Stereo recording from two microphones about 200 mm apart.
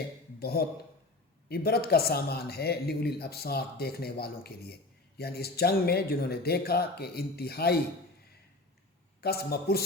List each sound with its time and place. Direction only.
0.3 s speech: 50° left (ahead or behind)
9.2 s speech: 50° left (ahead or behind)